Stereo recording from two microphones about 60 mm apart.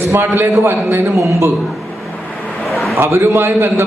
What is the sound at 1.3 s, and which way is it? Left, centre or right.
Speech, right.